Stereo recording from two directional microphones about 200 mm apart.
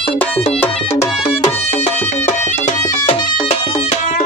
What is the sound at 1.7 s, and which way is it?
Music, 35° left (ahead or behind).